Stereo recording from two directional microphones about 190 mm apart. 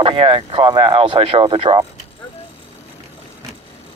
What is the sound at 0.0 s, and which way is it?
Speech, 25° right (ahead or behind).